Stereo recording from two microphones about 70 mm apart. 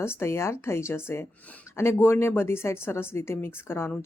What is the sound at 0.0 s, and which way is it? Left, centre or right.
Speech, left.